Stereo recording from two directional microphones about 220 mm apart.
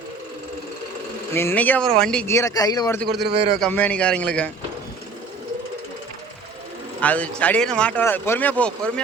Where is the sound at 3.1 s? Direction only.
50° right (ahead or behind).